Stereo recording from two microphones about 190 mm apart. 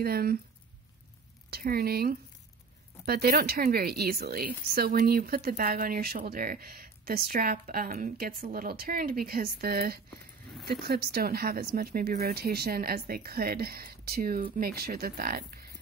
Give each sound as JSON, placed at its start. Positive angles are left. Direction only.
{"t": 0.0, "sound": "a woman's voice", "side_deg": -55}
{"t": 1.5, "sound": "a woman's voice", "side_deg": -55}